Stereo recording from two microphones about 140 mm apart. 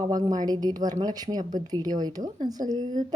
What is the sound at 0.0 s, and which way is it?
A woman's voice, 30° right (ahead or behind).